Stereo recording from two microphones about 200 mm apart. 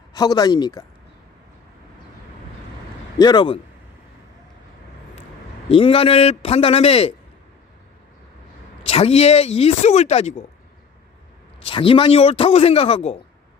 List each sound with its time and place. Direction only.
0.1 s a man's voice: 20° left (ahead or behind)
3.2 s a man's voice: 20° left (ahead or behind)
5.6 s a man's voice: 30° left (ahead or behind)
8.8 s speech: 30° left (ahead or behind)
11.7 s a man's voice: 25° left (ahead or behind)